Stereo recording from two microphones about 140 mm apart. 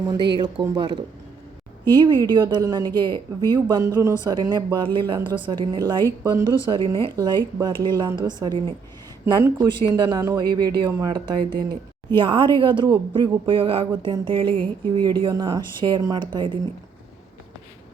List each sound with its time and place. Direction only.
0.1 s speech: 35° right (ahead or behind)
7.2 s speech: 25° right (ahead or behind)